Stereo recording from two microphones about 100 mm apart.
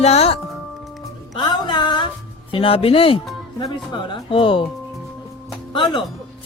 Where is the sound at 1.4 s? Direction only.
50° left (ahead or behind).